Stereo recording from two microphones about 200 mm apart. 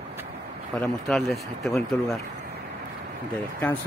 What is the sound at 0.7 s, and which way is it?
Speech, centre (ahead or behind).